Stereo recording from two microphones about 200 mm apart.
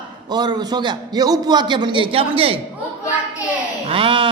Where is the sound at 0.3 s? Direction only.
20° right (ahead or behind).